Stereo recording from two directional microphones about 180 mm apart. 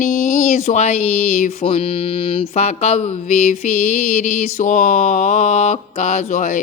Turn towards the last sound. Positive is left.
turn(degrees=45)  # may be behind; listen again after turning